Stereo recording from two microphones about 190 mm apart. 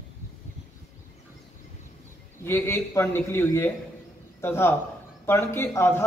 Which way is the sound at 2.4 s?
15° left (ahead or behind).